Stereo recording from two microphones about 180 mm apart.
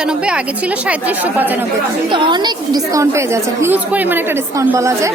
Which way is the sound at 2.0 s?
25° right (ahead or behind).